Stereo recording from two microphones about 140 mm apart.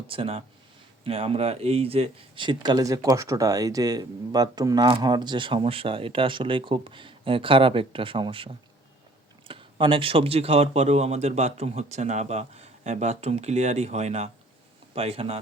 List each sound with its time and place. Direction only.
0.1 s speech: 40° right (ahead or behind)